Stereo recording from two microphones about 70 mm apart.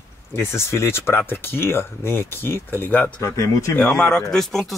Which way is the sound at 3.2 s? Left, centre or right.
Left.